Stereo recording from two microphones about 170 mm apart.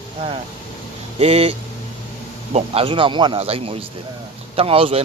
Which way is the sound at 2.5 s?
35° right (ahead or behind).